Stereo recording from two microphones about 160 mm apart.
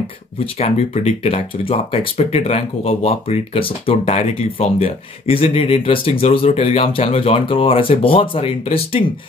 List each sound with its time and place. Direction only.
0.6 s speech: 40° left (ahead or behind)